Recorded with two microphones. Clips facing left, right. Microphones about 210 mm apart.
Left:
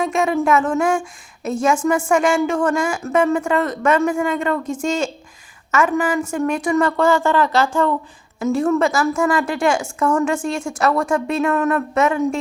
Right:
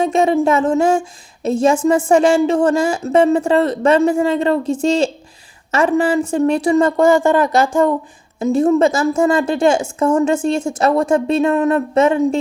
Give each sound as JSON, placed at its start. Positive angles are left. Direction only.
{"t": 0.0, "sound": "a woman's voice", "side_deg": -25}